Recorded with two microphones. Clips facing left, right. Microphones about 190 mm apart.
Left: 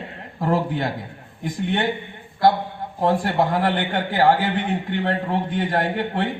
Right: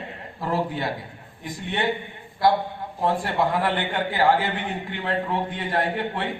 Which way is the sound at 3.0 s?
45° left (ahead or behind).